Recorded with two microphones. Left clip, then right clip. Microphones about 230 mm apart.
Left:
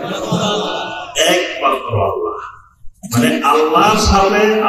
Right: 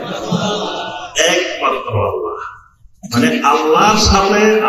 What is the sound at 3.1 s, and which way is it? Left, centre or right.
Mantra, right.